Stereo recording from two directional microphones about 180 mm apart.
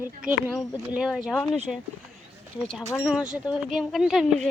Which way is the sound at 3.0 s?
5° right (ahead or behind).